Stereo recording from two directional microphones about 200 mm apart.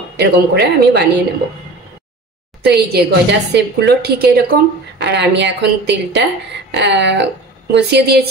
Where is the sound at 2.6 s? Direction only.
55° right (ahead or behind).